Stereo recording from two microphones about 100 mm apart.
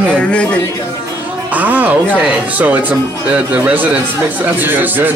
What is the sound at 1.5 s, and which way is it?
Speech, 15° right (ahead or behind).